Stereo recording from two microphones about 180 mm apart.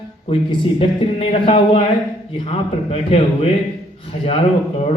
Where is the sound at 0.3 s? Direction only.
30° left (ahead or behind).